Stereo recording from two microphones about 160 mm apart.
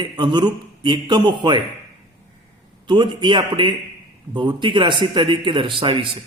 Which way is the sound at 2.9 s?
30° right (ahead or behind).